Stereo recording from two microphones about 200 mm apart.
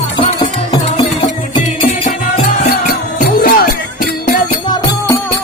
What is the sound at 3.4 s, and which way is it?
Music, 45° left (ahead or behind).